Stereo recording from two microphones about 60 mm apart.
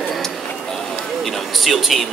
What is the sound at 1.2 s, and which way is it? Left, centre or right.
Speech, centre.